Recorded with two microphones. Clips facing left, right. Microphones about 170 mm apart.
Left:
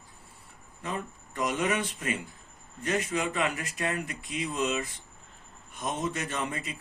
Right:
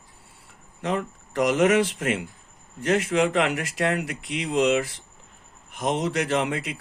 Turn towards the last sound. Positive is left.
turn(degrees=-80)